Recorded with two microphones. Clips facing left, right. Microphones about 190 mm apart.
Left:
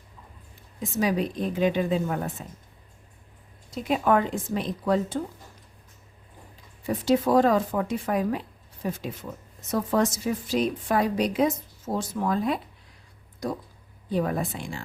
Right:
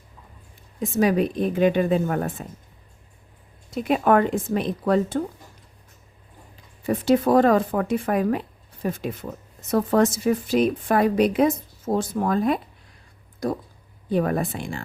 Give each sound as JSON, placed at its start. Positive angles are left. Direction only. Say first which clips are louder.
{"t": 0.8, "sound": "a woman's voice", "louder": "right 5 dB", "side_deg": -55}
{"t": 3.8, "sound": "a woman's voice", "louder": "right 4 dB", "side_deg": -60}
{"t": 6.8, "sound": "a woman's voice", "louder": "right 3 dB", "side_deg": -55}
{"t": 14.1, "sound": "a woman's voice", "louder": "right 4 dB", "side_deg": -60}